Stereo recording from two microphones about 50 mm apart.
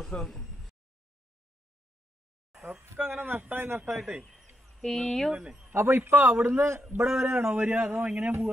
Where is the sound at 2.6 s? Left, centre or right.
Right.